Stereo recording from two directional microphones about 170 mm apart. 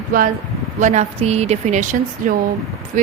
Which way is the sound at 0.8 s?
45° right (ahead or behind).